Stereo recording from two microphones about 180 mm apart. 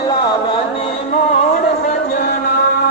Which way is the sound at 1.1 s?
45° left (ahead or behind).